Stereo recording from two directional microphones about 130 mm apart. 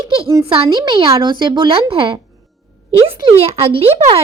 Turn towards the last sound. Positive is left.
turn(degrees=-50)  # may be behind; listen again after turning